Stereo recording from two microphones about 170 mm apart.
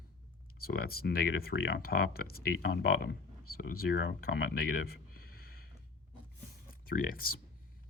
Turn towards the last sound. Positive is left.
turn(degrees=55)  # may be behind; listen again after turning